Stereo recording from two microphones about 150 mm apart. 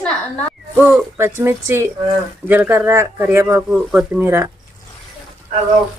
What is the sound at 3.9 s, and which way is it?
Speech, 5° right (ahead or behind).